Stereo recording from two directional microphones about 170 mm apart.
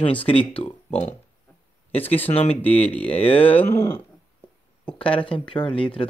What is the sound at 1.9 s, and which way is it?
Speech, 35° left (ahead or behind).